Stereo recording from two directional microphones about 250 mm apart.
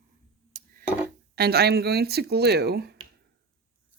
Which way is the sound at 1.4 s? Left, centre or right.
Right.